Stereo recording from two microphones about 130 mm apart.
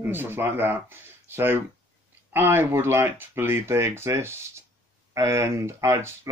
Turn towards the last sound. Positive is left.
turn(degrees=-20)  # may be behind; listen again after turning